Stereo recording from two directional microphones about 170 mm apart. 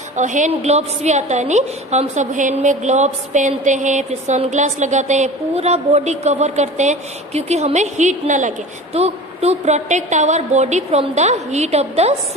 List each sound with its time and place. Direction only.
0.1 s a woman's voice: 45° right (ahead or behind)